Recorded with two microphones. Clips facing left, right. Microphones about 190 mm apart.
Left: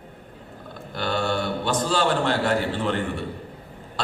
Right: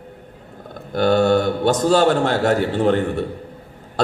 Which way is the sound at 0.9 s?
45° right (ahead or behind).